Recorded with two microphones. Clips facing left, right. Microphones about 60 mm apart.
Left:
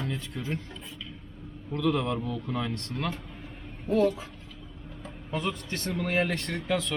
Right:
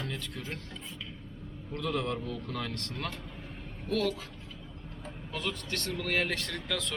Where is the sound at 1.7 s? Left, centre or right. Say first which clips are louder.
Left 5 dB; left.